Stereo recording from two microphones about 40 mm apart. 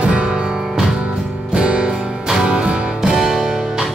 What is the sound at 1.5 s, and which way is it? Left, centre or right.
Music, right.